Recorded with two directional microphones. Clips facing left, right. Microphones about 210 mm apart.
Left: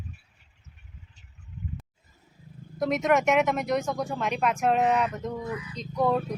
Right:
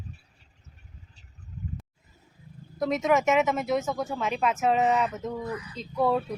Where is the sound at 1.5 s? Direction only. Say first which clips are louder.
Even; 40° right (ahead or behind).